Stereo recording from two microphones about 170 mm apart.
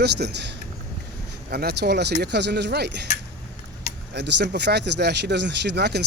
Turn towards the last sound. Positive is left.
turn(degrees=-75)  # may be behind; listen again after turning